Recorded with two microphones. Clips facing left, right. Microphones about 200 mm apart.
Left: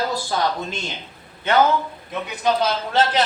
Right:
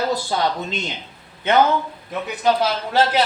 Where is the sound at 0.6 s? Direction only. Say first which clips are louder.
Right 2 dB; 20° right (ahead or behind).